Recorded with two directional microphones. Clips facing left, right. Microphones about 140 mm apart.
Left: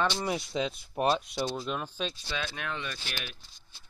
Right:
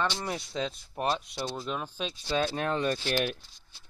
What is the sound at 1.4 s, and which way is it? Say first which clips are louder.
Speech: left 1 dB; centre (ahead or behind).